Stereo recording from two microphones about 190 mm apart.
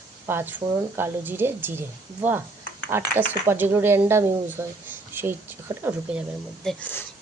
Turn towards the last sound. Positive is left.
turn(degrees=10)  # may be behind; listen again after turning